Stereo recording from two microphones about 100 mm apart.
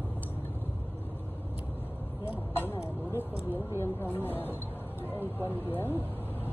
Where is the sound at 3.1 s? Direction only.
20° right (ahead or behind).